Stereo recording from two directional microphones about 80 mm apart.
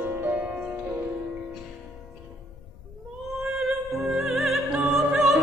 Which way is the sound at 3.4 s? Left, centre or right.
Centre.